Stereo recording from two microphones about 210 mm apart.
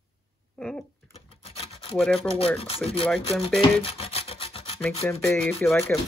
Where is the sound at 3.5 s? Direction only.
25° left (ahead or behind).